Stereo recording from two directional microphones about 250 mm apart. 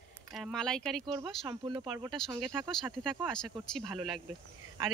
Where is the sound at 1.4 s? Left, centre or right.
Centre.